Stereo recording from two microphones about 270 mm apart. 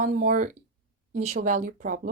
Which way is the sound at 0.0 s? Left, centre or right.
Right.